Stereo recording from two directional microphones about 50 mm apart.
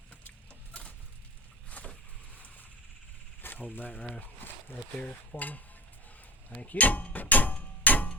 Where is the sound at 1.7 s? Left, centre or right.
Left.